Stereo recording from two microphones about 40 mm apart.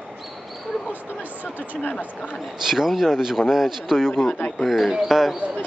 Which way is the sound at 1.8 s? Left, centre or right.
Left.